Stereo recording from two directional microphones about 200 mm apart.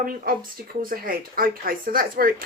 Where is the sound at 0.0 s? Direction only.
45° right (ahead or behind).